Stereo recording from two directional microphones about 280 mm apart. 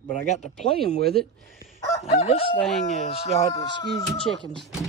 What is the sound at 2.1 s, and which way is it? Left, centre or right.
Speech, left.